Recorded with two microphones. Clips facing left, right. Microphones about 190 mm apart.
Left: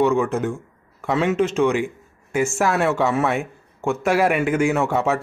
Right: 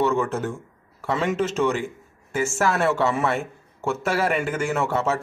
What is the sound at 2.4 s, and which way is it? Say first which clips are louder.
Speech: left 2 dB; centre (ahead or behind).